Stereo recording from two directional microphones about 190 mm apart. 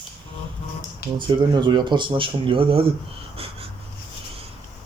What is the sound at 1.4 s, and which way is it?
Speech, 25° right (ahead or behind).